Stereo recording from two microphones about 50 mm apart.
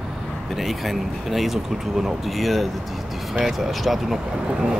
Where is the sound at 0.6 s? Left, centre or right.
Centre.